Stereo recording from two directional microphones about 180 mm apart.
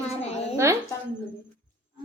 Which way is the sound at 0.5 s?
15° right (ahead or behind).